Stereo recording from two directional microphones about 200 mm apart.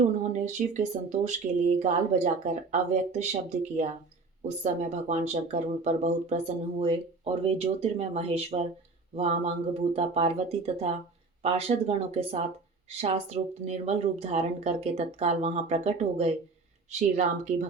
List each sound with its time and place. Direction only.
0.3 s speech: 35° right (ahead or behind)
4.4 s speech: 35° right (ahead or behind)